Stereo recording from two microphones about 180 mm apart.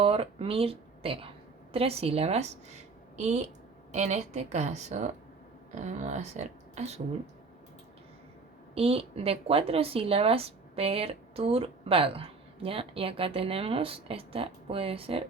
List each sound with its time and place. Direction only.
0.0 s a woman's voice: 30° right (ahead or behind)
8.7 s a woman's voice: 35° right (ahead or behind)